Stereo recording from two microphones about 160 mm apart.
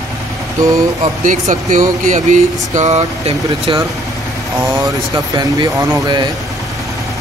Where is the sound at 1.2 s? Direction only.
50° right (ahead or behind); by 6.2 s 25° right (ahead or behind).